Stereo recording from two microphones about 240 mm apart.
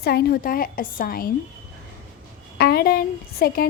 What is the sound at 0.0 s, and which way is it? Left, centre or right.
A woman's voice, left.